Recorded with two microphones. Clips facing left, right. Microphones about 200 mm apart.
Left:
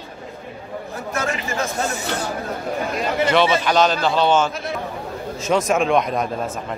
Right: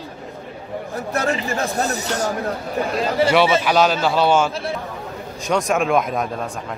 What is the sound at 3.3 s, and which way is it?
A man's voice, 10° right (ahead or behind).